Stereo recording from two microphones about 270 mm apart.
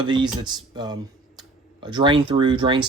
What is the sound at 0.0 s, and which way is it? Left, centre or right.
Speech, centre.